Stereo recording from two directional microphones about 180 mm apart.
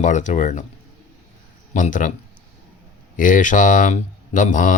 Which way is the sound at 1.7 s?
45° left (ahead or behind).